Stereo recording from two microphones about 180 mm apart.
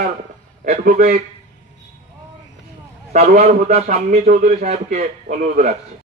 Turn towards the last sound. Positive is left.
turn(degrees=-40)  # may be behind; listen again after turning